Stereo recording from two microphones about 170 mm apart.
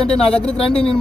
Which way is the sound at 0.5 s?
35° left (ahead or behind).